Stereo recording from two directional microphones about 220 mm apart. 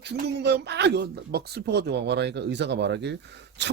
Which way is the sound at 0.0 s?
50° right (ahead or behind).